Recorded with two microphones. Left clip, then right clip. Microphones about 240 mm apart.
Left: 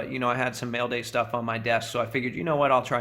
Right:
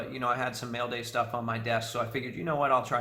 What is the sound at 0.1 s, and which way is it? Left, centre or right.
Speech, left.